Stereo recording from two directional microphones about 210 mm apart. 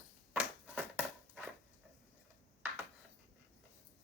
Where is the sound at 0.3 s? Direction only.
10° right (ahead or behind).